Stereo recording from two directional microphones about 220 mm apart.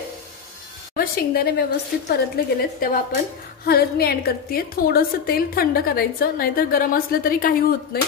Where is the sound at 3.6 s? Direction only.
45° left (ahead or behind).